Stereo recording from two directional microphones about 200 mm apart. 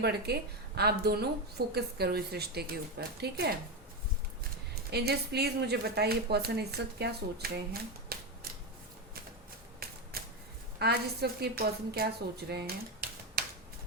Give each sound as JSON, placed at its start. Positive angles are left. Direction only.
{"t": 0.0, "sound": "speech", "side_deg": -55}
{"t": 4.7, "sound": "speech", "side_deg": -55}
{"t": 9.8, "sound": "shuffling cards", "side_deg": -50}
{"t": 10.8, "sound": "speech", "side_deg": -55}
{"t": 12.5, "sound": "typewriter", "side_deg": -50}